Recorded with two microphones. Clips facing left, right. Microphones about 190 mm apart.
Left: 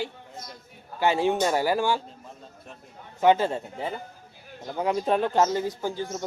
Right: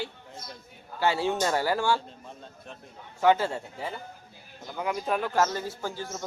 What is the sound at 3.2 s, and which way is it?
Speech, 20° left (ahead or behind).